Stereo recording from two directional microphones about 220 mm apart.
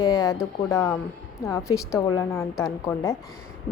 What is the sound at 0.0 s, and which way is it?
A woman's voice, 15° left (ahead or behind).